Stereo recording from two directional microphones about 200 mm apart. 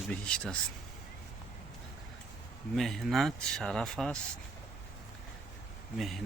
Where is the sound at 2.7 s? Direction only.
Centre (ahead or behind).